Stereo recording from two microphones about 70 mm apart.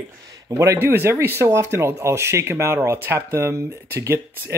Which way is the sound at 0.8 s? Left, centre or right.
Right.